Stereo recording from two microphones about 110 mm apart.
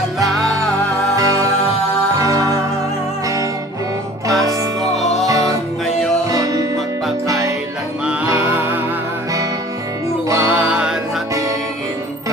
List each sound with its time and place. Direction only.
1.1 s music: 30° right (ahead or behind)
4.3 s music: 30° right (ahead or behind)
4.9 s music: centre (ahead or behind)
5.2 s music: 30° right (ahead or behind)
5.9 s music: 5° left (ahead or behind)
6.3 s music: 35° right (ahead or behind)
8.0 s music: 15° right (ahead or behind)
10.3 s music: 15° right (ahead or behind)